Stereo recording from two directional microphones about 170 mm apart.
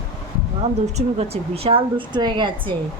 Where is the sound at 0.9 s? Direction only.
35° right (ahead or behind).